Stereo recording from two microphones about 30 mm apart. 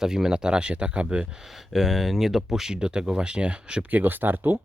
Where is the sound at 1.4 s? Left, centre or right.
Centre.